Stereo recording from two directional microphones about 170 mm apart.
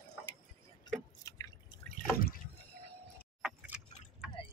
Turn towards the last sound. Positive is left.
turn(degrees=-5)  # may be behind; listen again after turning